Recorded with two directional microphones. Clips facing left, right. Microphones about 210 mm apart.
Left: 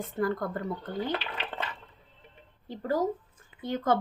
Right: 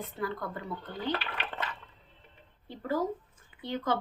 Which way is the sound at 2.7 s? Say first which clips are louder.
Left 3 dB; 40° left (ahead or behind).